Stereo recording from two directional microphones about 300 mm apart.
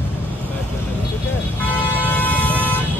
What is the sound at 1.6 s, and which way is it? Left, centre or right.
Vehicle, centre.